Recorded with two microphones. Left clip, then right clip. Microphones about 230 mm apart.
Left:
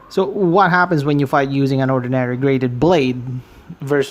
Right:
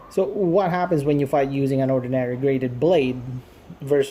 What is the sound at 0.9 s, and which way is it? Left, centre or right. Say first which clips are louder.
Speech: left 3 dB; left.